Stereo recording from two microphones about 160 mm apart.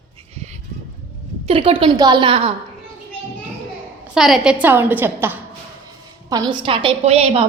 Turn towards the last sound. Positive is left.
turn(degrees=-40)  # may be behind; listen again after turning